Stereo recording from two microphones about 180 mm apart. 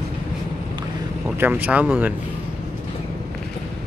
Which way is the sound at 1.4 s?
10° right (ahead or behind).